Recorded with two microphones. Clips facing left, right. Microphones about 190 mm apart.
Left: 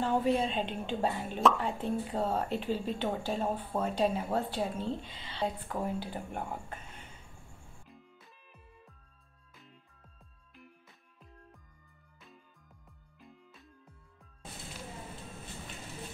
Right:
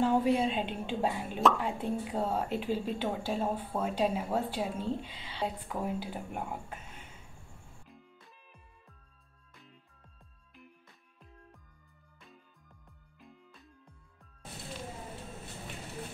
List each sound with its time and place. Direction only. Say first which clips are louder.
0.0 s speech: right 2 dB; 10° right (ahead or behind)
13.2 s music: even; centre (ahead or behind)